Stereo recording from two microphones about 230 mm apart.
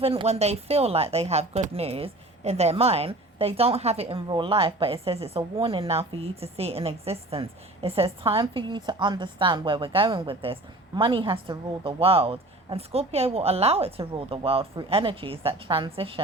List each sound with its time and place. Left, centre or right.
0.0 s speech: right